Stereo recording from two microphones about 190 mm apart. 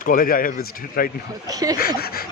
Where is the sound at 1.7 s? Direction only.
50° left (ahead or behind).